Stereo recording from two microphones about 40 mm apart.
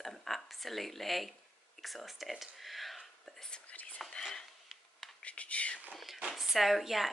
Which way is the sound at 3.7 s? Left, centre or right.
Left.